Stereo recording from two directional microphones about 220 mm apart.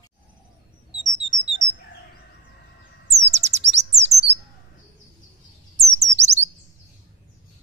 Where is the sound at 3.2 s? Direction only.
30° right (ahead or behind).